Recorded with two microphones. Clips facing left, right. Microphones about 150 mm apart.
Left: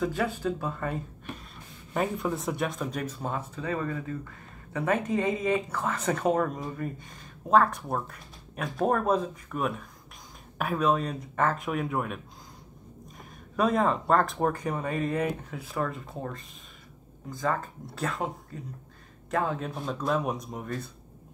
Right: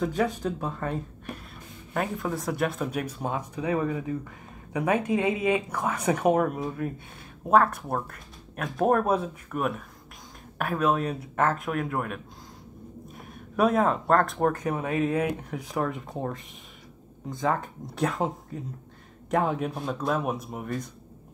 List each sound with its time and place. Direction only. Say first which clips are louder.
0.0 s speech: right 2 dB; centre (ahead or behind)
0.6 s speech: right 1 dB; 10° right (ahead or behind)
2.0 s speech: left 1 dB; centre (ahead or behind)
13.6 s speech: right 2 dB; 5° right (ahead or behind)
17.8 s speech: right 5 dB; 20° right (ahead or behind)